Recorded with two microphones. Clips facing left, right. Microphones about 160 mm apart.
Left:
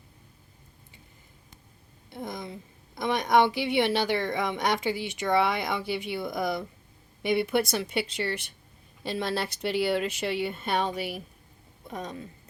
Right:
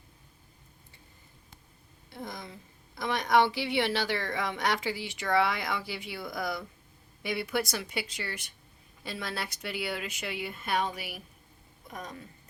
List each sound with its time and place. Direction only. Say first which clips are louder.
2.0 s a woman's voice: left 5 dB; 20° left (ahead or behind)